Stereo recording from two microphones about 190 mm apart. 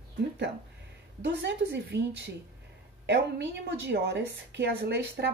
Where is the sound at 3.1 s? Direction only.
65° right (ahead or behind).